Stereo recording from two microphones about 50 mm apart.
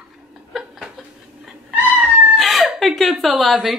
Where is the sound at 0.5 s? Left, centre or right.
Centre.